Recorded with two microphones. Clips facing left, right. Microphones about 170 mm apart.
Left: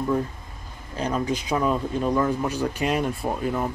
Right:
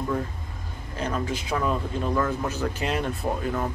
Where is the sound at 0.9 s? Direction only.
15° left (ahead or behind).